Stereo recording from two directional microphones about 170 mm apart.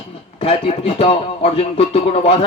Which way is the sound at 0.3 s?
35° left (ahead or behind).